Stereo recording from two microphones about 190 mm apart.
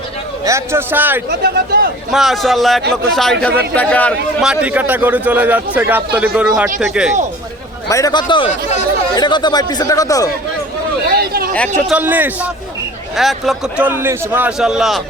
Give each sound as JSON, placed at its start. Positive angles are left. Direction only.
{"t": 0.4, "sound": "a man's voice", "side_deg": -15}
{"t": 1.3, "sound": "speech", "side_deg": -55}
{"t": 2.1, "sound": "a man's voice", "side_deg": 0}
{"t": 4.4, "sound": "a man's voice", "side_deg": -5}
{"t": 7.9, "sound": "speech", "side_deg": 15}
{"t": 11.1, "sound": "speech", "side_deg": -55}
{"t": 11.9, "sound": "a man's voice", "side_deg": -10}